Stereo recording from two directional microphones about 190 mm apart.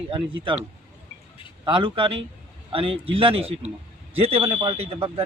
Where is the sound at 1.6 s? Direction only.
25° right (ahead or behind).